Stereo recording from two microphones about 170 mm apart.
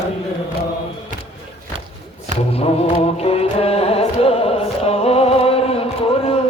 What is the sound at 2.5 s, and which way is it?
Music, 35° left (ahead or behind).